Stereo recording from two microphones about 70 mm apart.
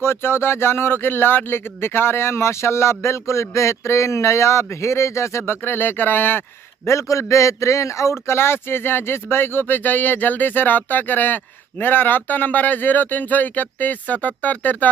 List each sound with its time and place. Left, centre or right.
0.0 s speech: left
5.4 s speech: left
6.9 s a man's voice: left